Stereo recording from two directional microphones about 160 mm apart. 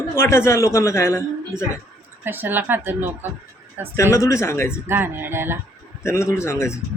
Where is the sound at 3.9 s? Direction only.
15° left (ahead or behind).